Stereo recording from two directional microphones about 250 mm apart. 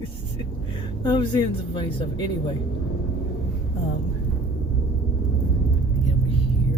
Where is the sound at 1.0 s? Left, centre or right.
Centre.